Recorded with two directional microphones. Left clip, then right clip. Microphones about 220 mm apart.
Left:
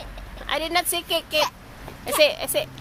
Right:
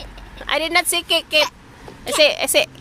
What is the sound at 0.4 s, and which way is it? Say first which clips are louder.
Speech: right 5 dB; 35° right (ahead or behind).